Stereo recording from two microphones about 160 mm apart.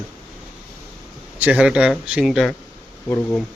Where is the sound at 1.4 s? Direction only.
10° right (ahead or behind).